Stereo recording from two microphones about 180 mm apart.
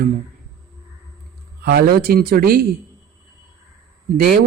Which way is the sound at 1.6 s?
55° right (ahead or behind).